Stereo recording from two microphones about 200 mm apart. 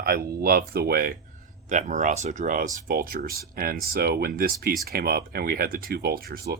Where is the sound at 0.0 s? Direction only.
50° right (ahead or behind).